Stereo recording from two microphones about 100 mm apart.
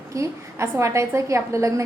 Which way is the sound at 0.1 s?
30° right (ahead or behind).